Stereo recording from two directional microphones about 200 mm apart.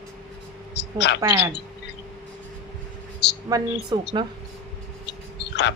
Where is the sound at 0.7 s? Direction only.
60° left (ahead or behind).